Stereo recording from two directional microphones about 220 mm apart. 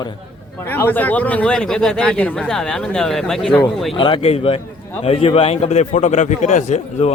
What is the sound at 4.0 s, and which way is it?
A man's voice, 25° left (ahead or behind).